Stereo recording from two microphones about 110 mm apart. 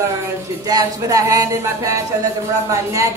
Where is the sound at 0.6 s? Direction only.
35° right (ahead or behind).